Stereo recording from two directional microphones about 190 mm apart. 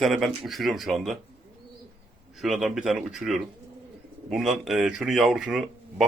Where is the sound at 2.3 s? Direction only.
Centre (ahead or behind).